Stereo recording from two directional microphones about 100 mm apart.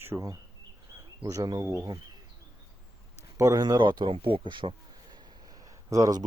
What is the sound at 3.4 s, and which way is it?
Speech, 30° right (ahead or behind).